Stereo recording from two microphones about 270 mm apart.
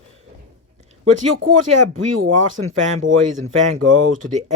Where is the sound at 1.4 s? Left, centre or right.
Right.